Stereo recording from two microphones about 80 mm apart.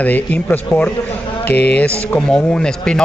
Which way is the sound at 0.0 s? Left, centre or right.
Left.